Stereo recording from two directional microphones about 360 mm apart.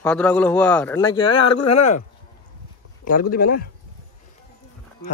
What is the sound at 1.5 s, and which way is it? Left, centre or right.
Speech, left.